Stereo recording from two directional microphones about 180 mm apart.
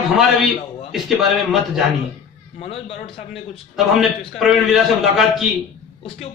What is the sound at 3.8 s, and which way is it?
A man's voice, centre (ahead or behind).